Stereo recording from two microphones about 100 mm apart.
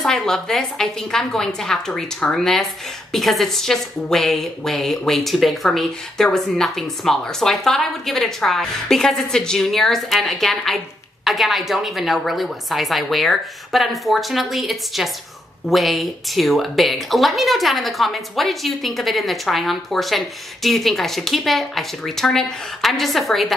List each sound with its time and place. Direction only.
0.0 s a woman's voice: 5° left (ahead or behind)